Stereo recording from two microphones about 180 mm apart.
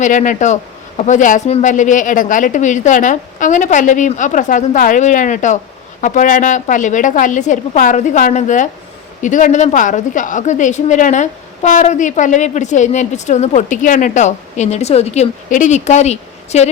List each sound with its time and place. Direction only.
0.0 s a man's voice: 45° left (ahead or behind)